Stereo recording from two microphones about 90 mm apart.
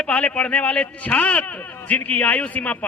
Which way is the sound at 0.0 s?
15° left (ahead or behind).